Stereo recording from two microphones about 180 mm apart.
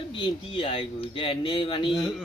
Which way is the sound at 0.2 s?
30° left (ahead or behind).